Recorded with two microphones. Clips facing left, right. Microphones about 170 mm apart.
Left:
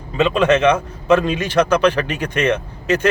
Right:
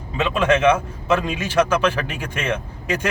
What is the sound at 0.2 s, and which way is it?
A man's voice, 10° right (ahead or behind).